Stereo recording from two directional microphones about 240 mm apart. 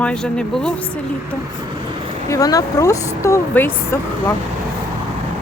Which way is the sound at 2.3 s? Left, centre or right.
Centre.